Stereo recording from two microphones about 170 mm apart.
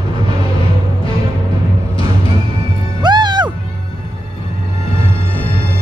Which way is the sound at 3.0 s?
25° right (ahead or behind).